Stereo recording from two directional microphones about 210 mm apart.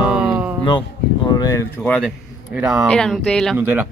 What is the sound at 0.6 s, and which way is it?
Speech, 20° left (ahead or behind).